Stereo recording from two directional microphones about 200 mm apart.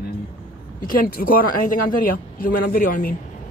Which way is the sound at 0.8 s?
45° left (ahead or behind).